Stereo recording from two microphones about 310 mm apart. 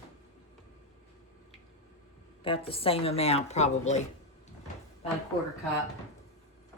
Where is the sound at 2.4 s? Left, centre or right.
Centre.